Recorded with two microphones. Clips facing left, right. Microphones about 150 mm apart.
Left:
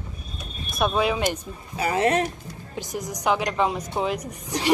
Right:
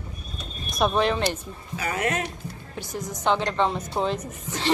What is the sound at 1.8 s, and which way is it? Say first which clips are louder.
Speech: left 5 dB; 30° left (ahead or behind).